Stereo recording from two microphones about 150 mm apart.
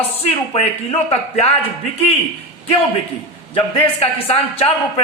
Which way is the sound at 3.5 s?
35° left (ahead or behind).